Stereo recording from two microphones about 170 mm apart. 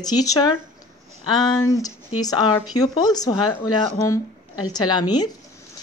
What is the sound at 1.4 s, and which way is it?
Speech, 20° left (ahead or behind).